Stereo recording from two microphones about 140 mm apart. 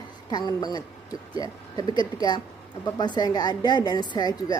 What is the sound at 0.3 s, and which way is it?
A woman's voice, 30° left (ahead or behind).